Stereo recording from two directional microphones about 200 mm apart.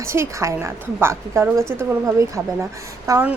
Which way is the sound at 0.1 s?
15° right (ahead or behind).